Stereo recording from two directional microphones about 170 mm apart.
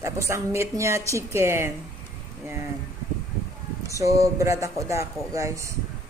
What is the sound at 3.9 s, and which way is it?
Speech, 20° right (ahead or behind).